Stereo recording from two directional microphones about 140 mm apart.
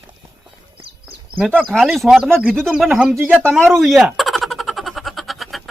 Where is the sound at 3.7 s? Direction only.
Centre (ahead or behind).